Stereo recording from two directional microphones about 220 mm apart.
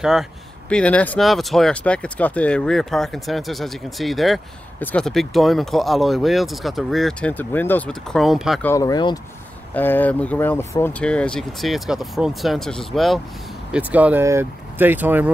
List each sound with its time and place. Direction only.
0.0 s speech: centre (ahead or behind)
8.6 s speech: 15° left (ahead or behind); by 15.3 s 10° right (ahead or behind)